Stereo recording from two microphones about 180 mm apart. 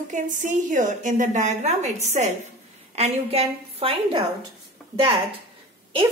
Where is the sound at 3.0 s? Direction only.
35° right (ahead or behind).